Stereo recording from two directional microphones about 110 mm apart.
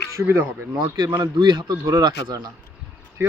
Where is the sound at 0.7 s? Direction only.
40° right (ahead or behind).